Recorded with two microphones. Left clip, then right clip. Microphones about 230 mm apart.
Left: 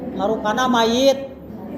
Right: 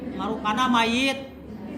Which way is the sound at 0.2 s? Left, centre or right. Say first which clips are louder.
Left 5 dB; centre.